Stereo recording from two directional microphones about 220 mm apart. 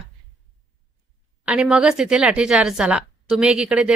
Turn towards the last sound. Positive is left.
turn(degrees=-5)  # may be behind; listen again after turning